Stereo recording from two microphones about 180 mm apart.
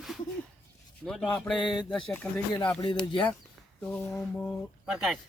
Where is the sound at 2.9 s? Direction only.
25° left (ahead or behind).